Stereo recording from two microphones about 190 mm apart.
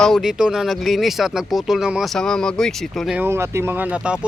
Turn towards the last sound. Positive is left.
turn(degrees=-5)  # may be behind; listen again after turning